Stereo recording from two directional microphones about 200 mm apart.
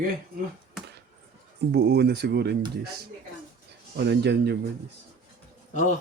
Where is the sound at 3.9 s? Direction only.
55° right (ahead or behind).